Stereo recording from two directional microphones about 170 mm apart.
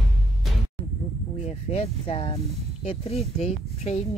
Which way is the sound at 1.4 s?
40° left (ahead or behind).